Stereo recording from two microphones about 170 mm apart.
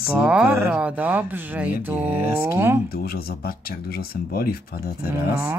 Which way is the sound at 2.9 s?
65° left (ahead or behind).